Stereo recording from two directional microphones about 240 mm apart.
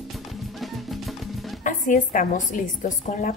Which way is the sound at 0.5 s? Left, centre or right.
Centre.